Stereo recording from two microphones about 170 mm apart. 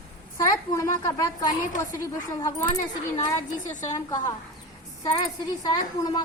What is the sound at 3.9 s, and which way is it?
Speech, 20° left (ahead or behind).